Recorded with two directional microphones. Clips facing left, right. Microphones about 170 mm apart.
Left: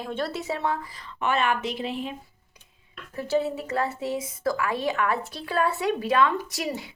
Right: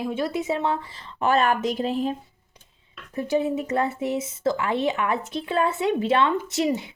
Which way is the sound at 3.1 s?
20° right (ahead or behind).